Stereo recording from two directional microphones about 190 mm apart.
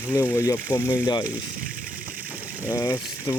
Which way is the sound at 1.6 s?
45° right (ahead or behind).